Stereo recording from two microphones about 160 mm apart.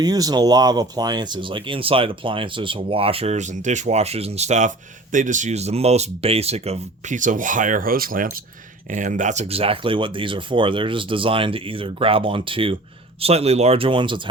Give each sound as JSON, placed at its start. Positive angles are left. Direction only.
{"t": 0.0, "sound": "speech", "side_deg": -25}